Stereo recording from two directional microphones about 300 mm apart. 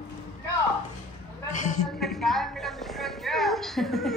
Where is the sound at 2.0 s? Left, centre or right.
Centre.